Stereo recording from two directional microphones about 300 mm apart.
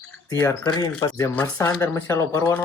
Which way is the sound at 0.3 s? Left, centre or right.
Centre.